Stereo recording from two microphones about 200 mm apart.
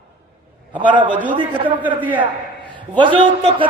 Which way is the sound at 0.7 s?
25° right (ahead or behind).